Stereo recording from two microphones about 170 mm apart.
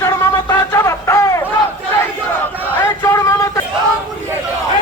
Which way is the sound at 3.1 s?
20° left (ahead or behind).